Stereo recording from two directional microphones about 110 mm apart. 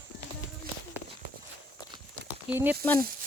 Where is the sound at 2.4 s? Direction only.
15° right (ahead or behind).